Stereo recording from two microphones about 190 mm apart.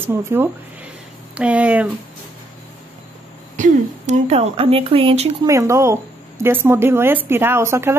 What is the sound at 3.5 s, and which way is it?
Speech, 40° right (ahead or behind).